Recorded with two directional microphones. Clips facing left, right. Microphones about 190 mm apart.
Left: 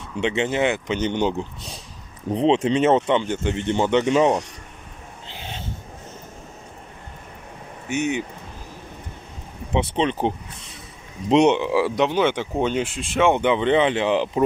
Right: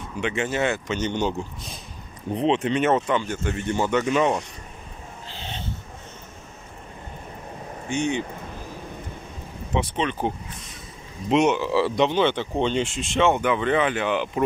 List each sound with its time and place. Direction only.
0.2 s speech: 25° left (ahead or behind)
2.3 s speech: 30° left (ahead or behind)
5.3 s a sound: 10° left (ahead or behind)
7.9 s speech: 5° left (ahead or behind)
9.9 s speech: 30° left (ahead or behind)
11.6 s speech: 10° left (ahead or behind)
13.3 s speech: 20° left (ahead or behind)